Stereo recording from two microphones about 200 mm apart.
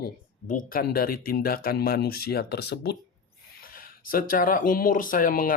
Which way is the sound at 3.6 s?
45° left (ahead or behind).